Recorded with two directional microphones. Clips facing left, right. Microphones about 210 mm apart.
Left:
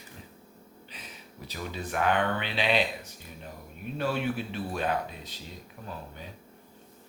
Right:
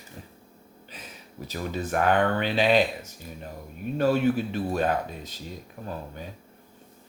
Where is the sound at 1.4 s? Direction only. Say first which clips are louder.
Right 6 dB; 45° right (ahead or behind).